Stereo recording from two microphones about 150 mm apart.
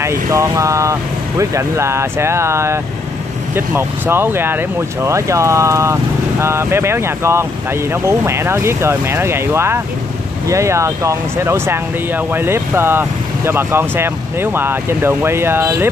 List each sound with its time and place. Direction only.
0.0 s speech: 20° right (ahead or behind)